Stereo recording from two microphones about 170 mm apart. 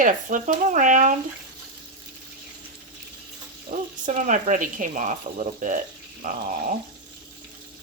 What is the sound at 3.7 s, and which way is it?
Speech, 55° right (ahead or behind).